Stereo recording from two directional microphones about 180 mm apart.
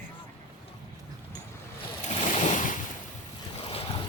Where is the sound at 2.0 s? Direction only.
40° left (ahead or behind).